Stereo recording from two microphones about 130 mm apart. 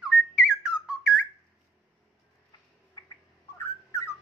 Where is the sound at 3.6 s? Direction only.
20° left (ahead or behind).